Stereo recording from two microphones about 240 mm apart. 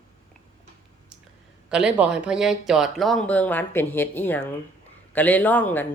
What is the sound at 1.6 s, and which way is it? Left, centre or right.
Speech, centre.